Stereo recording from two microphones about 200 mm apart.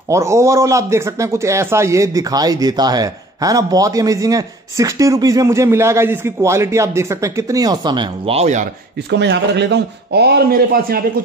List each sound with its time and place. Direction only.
0.1 s a man's voice: 15° right (ahead or behind); by 8.6 s 35° right (ahead or behind)
9.1 s speech: 60° right (ahead or behind)